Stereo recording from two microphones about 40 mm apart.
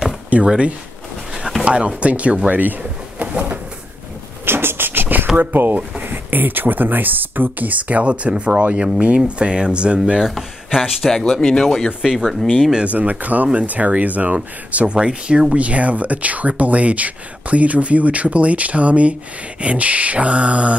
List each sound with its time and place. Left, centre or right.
0.5 s speech: right
2.8 s a sound: right
4.5 s beatboxing: right
5.4 s speech: right
10.8 s speech: centre
12.0 s speech: centre
12.3 s speech: centre
12.8 s speech: right
15.6 s speech: right